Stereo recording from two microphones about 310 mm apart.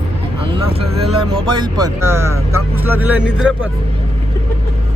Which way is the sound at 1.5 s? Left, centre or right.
Centre.